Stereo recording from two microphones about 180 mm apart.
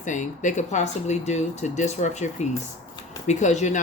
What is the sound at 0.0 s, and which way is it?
Speech, 45° left (ahead or behind).